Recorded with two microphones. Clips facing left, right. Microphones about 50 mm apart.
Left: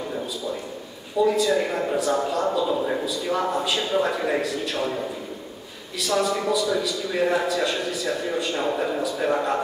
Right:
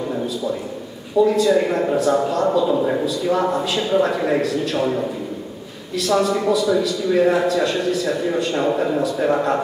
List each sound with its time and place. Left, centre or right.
1.2 s a man's voice: centre
6.0 s a man's voice: centre